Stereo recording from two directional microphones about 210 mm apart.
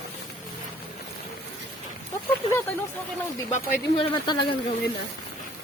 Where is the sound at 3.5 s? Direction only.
25° left (ahead or behind).